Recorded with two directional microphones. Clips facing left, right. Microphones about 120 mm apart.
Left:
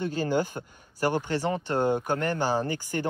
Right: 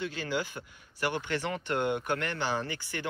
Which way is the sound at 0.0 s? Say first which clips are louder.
Left 7 dB; 45° left (ahead or behind).